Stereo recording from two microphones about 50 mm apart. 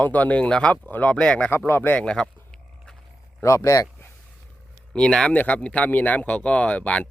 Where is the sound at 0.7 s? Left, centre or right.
Left.